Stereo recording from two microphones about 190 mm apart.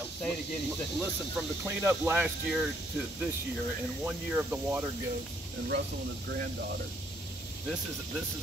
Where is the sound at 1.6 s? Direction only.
10° right (ahead or behind).